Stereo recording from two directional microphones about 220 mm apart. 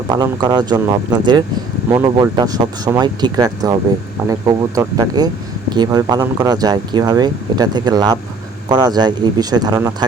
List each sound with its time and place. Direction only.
0.1 s speech: 20° right (ahead or behind)